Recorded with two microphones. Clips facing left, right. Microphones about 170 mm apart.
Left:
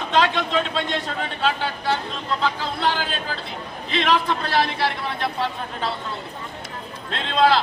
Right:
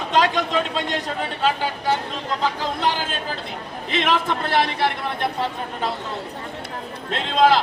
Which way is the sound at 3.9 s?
50° right (ahead or behind).